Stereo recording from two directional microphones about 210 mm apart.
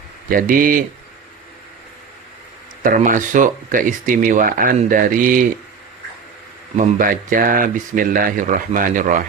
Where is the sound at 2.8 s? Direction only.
40° right (ahead or behind).